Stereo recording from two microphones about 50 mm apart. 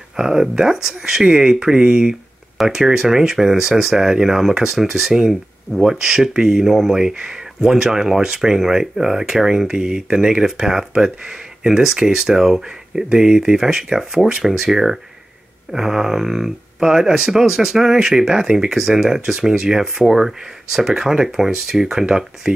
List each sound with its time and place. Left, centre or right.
0.1 s speech: centre